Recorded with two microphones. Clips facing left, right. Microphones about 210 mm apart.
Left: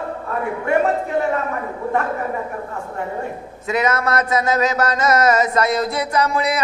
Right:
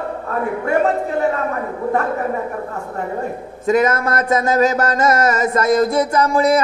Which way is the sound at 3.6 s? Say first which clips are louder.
Right 4 dB; 50° right (ahead or behind).